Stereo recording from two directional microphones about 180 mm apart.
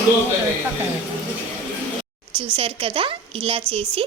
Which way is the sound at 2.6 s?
30° right (ahead or behind).